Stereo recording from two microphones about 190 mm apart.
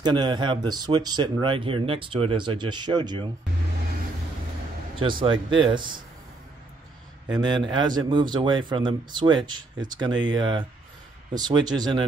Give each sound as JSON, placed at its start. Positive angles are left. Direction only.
{"t": 0.0, "sound": "speech", "side_deg": -25}
{"t": 4.9, "sound": "speech", "side_deg": -25}
{"t": 7.3, "sound": "speech", "side_deg": -20}